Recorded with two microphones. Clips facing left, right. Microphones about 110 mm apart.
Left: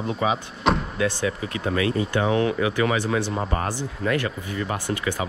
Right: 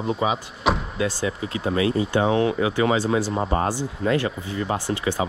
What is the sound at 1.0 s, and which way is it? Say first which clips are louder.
Speech: right 1 dB; 25° right (ahead or behind).